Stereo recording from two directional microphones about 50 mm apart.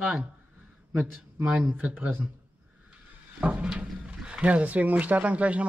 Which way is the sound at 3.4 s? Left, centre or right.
Right.